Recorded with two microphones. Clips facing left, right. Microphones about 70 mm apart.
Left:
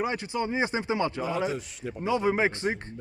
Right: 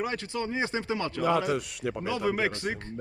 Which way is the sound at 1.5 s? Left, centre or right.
Right.